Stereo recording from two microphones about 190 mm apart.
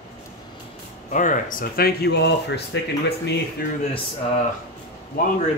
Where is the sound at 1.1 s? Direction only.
40° left (ahead or behind); by 2.6 s 60° left (ahead or behind).